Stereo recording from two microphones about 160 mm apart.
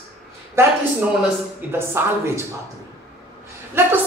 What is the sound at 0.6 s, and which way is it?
A man's voice, 15° right (ahead or behind).